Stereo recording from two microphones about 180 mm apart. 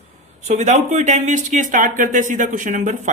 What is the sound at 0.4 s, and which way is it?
A man's voice, 40° right (ahead or behind).